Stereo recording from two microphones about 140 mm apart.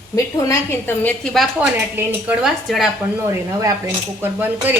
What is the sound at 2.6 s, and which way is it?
Speech, centre (ahead or behind).